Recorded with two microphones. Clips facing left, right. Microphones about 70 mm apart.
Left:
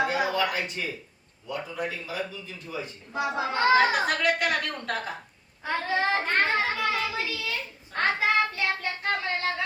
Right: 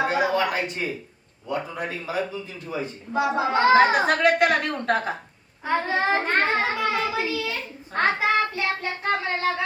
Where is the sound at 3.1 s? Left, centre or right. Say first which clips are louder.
Right 6 dB; centre.